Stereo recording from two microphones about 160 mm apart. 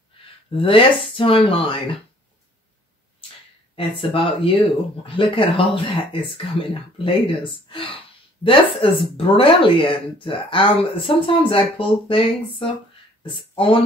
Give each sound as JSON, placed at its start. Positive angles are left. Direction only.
{"t": 0.6, "sound": "speech", "side_deg": 35}
{"t": 3.7, "sound": "speech", "side_deg": 35}